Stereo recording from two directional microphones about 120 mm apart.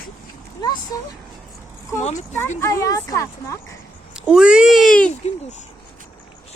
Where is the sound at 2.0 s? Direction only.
70° left (ahead or behind).